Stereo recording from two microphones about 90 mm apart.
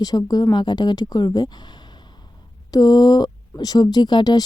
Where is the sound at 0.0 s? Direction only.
45° left (ahead or behind).